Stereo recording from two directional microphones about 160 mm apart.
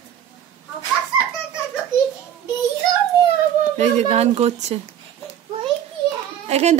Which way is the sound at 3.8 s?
45° right (ahead or behind).